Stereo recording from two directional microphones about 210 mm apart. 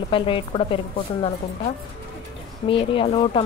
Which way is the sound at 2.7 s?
25° left (ahead or behind).